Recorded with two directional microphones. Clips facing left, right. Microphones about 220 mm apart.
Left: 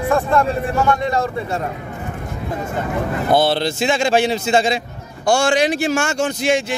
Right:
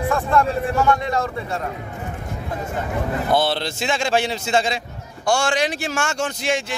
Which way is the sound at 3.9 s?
15° left (ahead or behind).